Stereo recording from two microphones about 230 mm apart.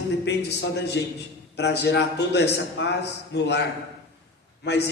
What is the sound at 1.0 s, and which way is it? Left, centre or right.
A man's voice, left.